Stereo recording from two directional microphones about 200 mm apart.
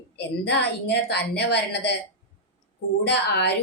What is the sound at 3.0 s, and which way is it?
Speech, 55° left (ahead or behind).